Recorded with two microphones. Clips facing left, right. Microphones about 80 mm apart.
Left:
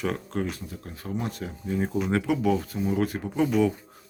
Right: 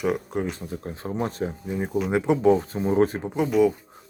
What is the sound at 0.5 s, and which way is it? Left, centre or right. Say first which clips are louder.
Speech: right 6 dB; right.